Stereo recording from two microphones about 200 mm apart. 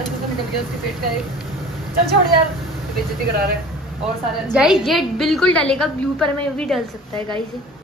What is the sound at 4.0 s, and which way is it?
A woman's voice, 5° right (ahead or behind).